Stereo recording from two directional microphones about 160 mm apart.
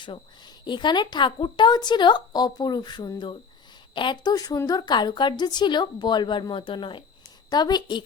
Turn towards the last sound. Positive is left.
turn(degrees=25)  # may be behind; listen again after turning